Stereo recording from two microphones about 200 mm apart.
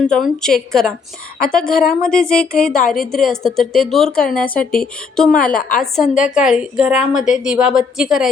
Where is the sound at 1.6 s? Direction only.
45° left (ahead or behind).